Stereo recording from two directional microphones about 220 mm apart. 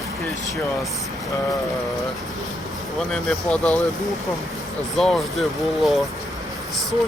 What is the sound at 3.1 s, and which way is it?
Speech, 5° left (ahead or behind).